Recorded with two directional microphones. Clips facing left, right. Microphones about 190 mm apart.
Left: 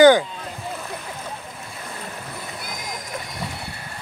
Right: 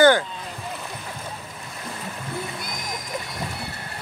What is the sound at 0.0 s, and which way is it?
Rowboat, 15° left (ahead or behind).